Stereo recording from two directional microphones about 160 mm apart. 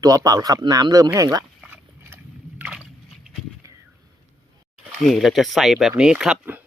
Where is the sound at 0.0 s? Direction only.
20° right (ahead or behind).